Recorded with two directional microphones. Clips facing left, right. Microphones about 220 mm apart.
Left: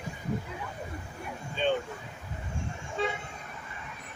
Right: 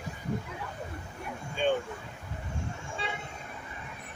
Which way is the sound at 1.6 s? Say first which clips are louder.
Right 1 dB; 10° right (ahead or behind).